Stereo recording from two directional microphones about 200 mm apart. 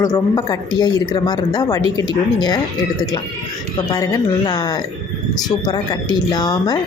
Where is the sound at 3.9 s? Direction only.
20° left (ahead or behind).